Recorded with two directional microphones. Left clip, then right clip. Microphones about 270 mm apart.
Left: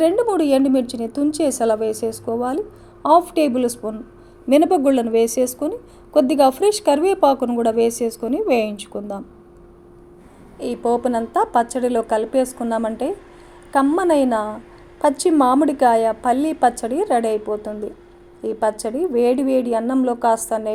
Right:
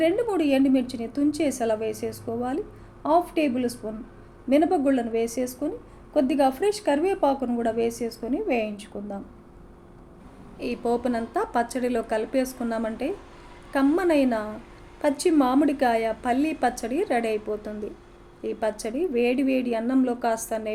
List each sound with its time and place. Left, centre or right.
0.0 s a woman's voice: left
10.6 s a woman's voice: centre